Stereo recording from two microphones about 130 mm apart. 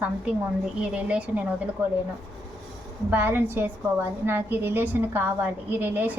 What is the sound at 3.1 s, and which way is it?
A woman's voice, 15° right (ahead or behind).